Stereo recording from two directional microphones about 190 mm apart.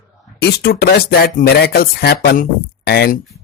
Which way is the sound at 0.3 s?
55° left (ahead or behind).